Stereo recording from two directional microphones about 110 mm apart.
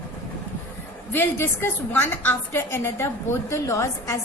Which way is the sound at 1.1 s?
20° left (ahead or behind).